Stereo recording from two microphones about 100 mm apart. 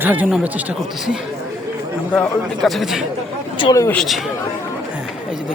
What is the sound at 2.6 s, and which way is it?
Speech, centre (ahead or behind).